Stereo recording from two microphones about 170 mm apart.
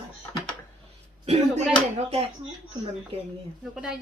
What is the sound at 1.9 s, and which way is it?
Speech, 35° right (ahead or behind).